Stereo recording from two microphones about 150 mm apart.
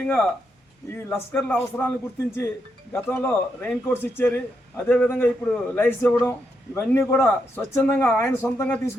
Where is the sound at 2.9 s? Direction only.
15° left (ahead or behind).